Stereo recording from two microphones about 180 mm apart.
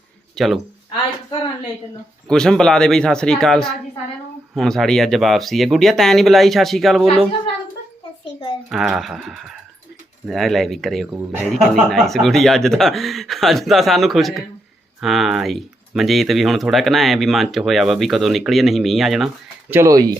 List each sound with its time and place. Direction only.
0.3 s speech: centre (ahead or behind)
2.2 s speech: 5° left (ahead or behind)
8.7 s speech: centre (ahead or behind)
19.7 s speech: 15° right (ahead or behind)